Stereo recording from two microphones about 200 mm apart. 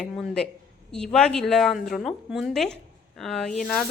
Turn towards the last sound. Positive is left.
turn(degrees=0)  # may be behind; listen again after turning